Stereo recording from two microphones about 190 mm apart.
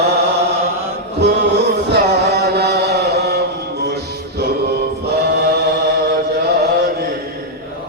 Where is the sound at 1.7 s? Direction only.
60° right (ahead or behind).